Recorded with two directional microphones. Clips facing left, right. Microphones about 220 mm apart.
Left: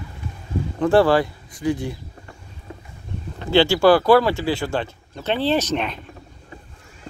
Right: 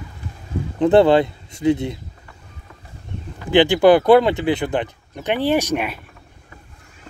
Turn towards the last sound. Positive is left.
turn(degrees=-10)  # may be behind; listen again after turning